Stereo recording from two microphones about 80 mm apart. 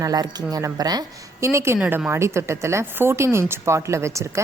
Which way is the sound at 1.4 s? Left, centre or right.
Right.